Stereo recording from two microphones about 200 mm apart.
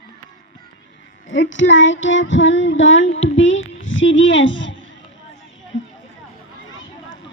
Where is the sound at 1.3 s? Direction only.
70° left (ahead or behind).